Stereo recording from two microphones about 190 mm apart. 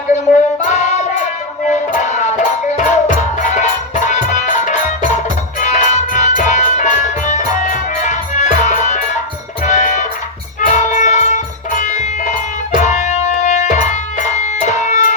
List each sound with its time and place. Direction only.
0.7 s music: 35° left (ahead or behind)